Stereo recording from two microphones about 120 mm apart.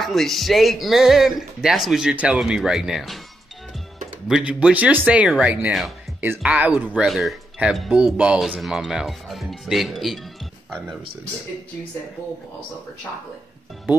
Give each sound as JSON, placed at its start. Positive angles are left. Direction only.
{"t": 0.0, "sound": "speech", "side_deg": 0}
{"t": 4.3, "sound": "speech", "side_deg": -10}
{"t": 6.2, "sound": "speech", "side_deg": -15}
{"t": 6.5, "sound": "speech", "side_deg": -5}